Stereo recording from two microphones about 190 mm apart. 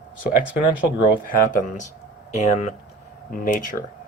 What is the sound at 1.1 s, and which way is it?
Speech, 45° left (ahead or behind).